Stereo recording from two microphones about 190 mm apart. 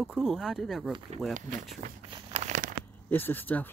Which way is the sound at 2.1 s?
30° right (ahead or behind).